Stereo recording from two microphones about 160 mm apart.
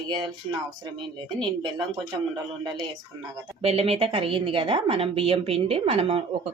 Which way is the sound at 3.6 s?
40° right (ahead or behind).